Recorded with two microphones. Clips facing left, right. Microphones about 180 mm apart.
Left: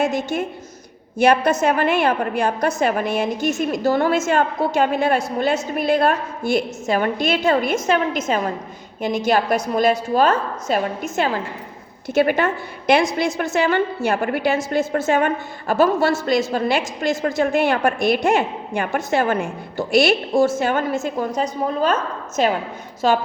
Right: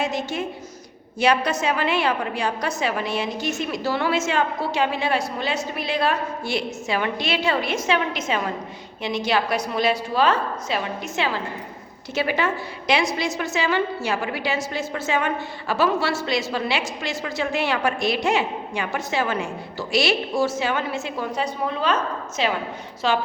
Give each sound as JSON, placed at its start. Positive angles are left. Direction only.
{"t": 0.0, "sound": "a woman's voice", "side_deg": 50}